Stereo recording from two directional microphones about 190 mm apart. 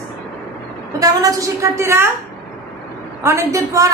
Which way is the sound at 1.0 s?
20° right (ahead or behind).